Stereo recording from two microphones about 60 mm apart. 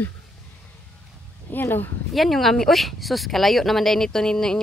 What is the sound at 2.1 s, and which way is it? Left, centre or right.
Speech, centre.